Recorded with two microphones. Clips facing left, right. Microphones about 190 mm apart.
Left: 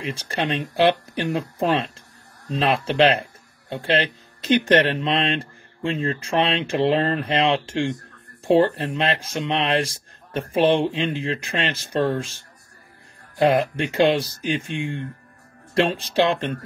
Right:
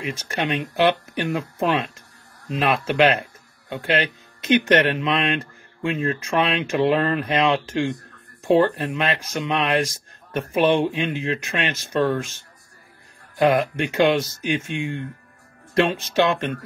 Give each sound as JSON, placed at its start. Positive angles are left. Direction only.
{"t": 0.0, "sound": "speech", "side_deg": 30}
{"t": 13.4, "sound": "speech", "side_deg": 30}
{"t": 14.7, "sound": "speech", "side_deg": -15}
{"t": 16.1, "sound": "speech", "side_deg": 30}